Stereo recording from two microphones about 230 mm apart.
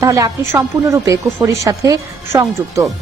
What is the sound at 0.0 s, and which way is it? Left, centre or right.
A woman's voice, centre.